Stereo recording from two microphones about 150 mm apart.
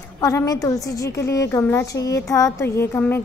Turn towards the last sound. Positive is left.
turn(degrees=15)  # may be behind; listen again after turning